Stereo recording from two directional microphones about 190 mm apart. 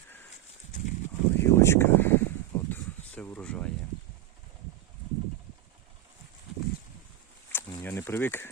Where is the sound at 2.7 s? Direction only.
10° left (ahead or behind).